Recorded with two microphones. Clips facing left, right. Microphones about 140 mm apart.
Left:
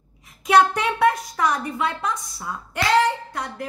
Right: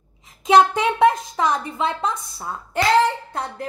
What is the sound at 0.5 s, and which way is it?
A woman's voice, 20° right (ahead or behind).